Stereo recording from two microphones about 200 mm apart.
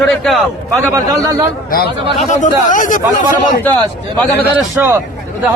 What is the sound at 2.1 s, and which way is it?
Speech, 40° left (ahead or behind).